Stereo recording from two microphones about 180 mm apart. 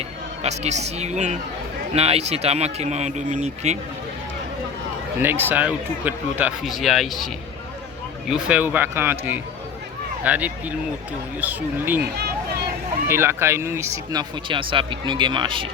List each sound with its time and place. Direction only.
0.4 s speech: 40° right (ahead or behind)
5.2 s speech: 10° right (ahead or behind)
8.3 s speech: 5° right (ahead or behind)
13.1 s speech: 15° right (ahead or behind)